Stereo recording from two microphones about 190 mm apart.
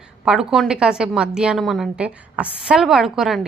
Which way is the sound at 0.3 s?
Centre (ahead or behind).